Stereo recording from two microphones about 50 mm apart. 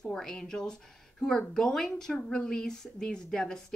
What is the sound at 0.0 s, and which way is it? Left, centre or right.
A woman's voice, centre.